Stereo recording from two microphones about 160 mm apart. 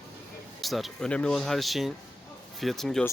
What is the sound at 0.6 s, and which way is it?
Speech, centre (ahead or behind).